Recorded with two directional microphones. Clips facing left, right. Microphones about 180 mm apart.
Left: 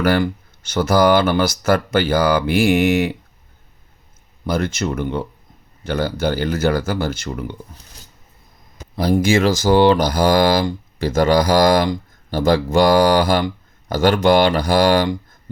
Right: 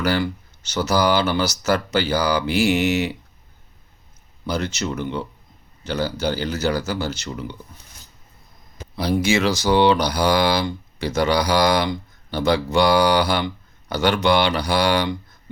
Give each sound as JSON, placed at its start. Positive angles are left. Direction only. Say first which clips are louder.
{"t": 0.0, "sound": "speech", "louder": "left 4 dB", "side_deg": 50}
{"t": 4.4, "sound": "speech", "louder": "left 4 dB", "side_deg": 50}
{"t": 9.0, "sound": "speech", "louder": "left 4 dB", "side_deg": 50}